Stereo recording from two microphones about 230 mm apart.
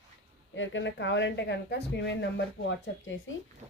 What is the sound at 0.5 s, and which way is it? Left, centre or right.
Speech, left.